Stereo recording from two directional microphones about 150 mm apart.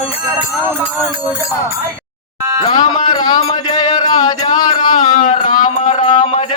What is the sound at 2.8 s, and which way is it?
Speech, 30° left (ahead or behind).